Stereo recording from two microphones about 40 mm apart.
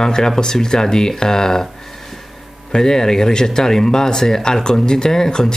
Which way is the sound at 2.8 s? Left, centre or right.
Centre.